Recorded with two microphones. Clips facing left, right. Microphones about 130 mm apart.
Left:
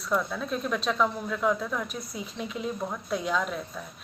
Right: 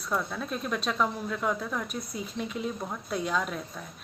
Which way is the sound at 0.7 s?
Centre (ahead or behind).